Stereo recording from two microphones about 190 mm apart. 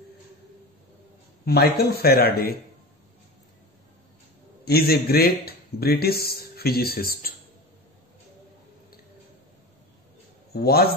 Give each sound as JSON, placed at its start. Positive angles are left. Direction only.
{"t": 1.4, "sound": "a man's voice", "side_deg": 55}
{"t": 4.6, "sound": "speech", "side_deg": 55}
{"t": 10.5, "sound": "a man's voice", "side_deg": 55}